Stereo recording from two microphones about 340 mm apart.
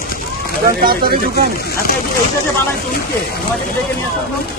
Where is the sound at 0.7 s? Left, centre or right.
Right.